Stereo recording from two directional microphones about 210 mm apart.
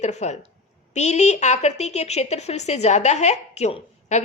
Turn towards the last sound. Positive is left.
turn(degrees=30)  # may be behind; listen again after turning